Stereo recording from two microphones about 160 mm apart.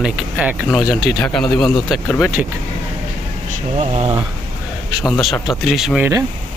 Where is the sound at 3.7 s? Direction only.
40° right (ahead or behind).